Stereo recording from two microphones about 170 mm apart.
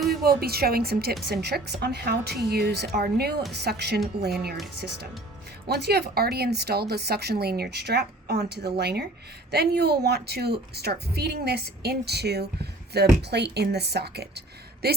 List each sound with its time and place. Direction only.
0.1 s a woman's voice: 65° right (ahead or behind)
5.6 s speech: 70° right (ahead or behind)